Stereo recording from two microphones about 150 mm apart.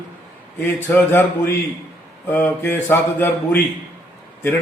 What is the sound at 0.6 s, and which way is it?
A man's voice, 10° left (ahead or behind).